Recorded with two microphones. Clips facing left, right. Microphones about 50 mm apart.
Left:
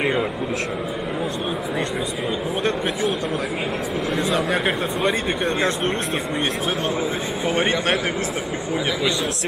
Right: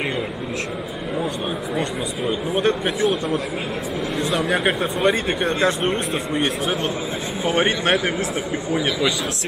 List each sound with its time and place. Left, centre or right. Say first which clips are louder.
4.3 s speech: right 2 dB; centre
4.6 s speech: right 2 dB; centre
7.4 s speech: right 2 dB; centre